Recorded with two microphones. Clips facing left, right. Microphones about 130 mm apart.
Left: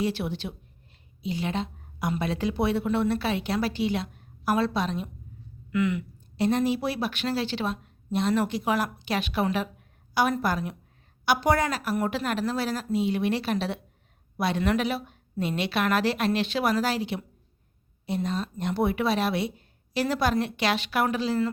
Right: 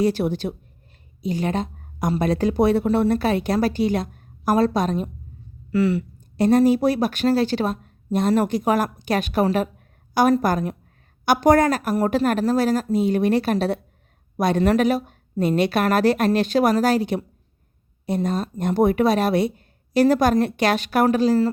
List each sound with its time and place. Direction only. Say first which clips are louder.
0.0 s a woman's voice: right 8 dB; 40° right (ahead or behind)